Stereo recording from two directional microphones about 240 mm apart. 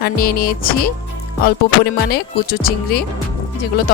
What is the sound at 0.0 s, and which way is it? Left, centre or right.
Speech, left.